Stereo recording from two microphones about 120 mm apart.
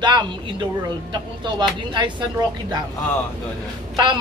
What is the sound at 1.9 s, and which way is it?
Speech, 40° right (ahead or behind).